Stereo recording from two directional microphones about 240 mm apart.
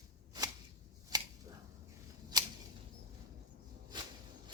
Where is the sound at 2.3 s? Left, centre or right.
Centre.